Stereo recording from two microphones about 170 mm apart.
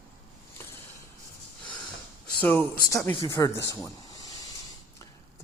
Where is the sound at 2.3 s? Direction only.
10° left (ahead or behind).